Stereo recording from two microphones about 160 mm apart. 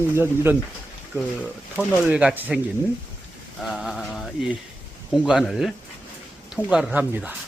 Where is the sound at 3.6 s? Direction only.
Centre (ahead or behind).